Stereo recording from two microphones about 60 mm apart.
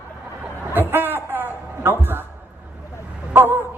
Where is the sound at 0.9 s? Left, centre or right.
Right.